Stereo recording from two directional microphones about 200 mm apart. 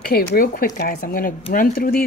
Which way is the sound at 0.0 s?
50° left (ahead or behind).